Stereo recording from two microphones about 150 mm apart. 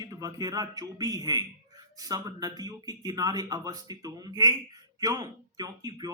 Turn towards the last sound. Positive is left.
turn(degrees=-25)  # may be behind; listen again after turning